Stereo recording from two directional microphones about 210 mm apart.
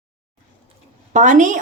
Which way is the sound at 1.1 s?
35° right (ahead or behind).